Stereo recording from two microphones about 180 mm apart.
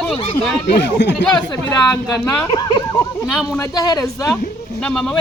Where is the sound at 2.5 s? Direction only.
25° left (ahead or behind).